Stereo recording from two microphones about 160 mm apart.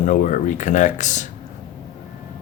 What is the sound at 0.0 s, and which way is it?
Speech, 50° left (ahead or behind).